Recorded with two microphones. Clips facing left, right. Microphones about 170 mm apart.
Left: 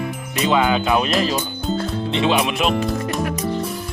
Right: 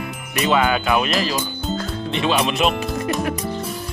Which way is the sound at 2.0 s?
20° left (ahead or behind).